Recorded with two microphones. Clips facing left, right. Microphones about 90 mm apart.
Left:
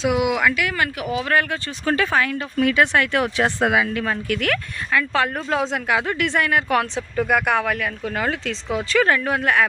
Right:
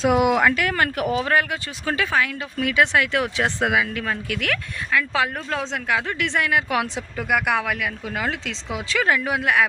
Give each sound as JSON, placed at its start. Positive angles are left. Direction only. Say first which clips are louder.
{"t": 0.0, "sound": "speech", "louder": "right 2 dB", "side_deg": -40}
{"t": 1.2, "sound": "speech", "louder": "even", "side_deg": -15}